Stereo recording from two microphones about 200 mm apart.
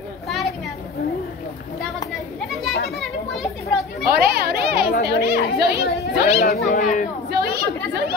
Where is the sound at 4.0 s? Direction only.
50° right (ahead or behind).